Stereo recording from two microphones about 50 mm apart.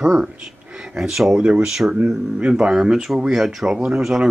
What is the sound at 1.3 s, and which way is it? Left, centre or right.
Speech, right.